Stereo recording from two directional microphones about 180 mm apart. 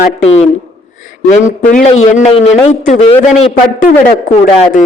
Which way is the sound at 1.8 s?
40° left (ahead or behind).